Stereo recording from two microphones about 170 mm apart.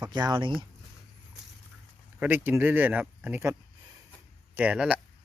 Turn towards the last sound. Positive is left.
turn(degrees=-5)  # may be behind; listen again after turning